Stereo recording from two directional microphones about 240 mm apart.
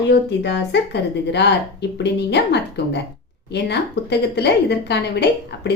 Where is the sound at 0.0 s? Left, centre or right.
Left.